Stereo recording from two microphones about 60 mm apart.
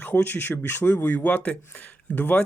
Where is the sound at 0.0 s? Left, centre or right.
Left.